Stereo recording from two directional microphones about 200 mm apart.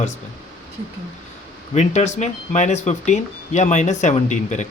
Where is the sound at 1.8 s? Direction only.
35° left (ahead or behind).